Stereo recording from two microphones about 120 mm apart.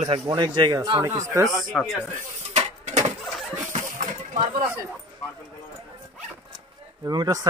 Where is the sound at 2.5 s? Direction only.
80° right.